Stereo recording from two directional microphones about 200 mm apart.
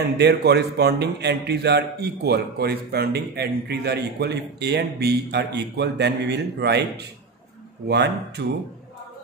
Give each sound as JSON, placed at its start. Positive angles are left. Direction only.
{"t": 0.2, "sound": "a man's voice", "side_deg": -55}
{"t": 7.9, "sound": "a man's voice", "side_deg": -55}